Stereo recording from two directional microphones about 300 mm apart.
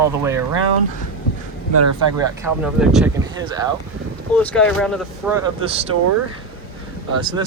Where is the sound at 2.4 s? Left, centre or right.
Centre.